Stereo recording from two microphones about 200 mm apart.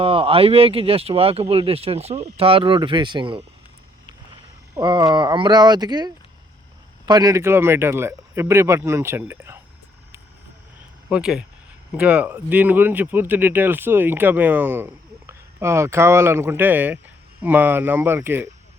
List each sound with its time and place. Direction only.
0.0 s speech: 25° right (ahead or behind)
4.7 s speech: 20° right (ahead or behind)
11.1 s speech: 5° right (ahead or behind)